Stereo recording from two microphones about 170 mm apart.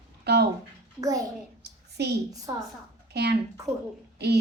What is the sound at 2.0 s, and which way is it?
Speech, 75° right (ahead or behind).